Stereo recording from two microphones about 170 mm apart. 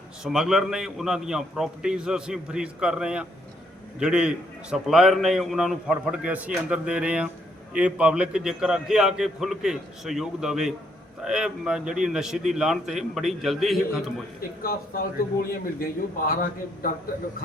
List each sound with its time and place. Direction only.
0.3 s a man's voice: 5° right (ahead or behind)
14.6 s a man's voice: 60° left (ahead or behind)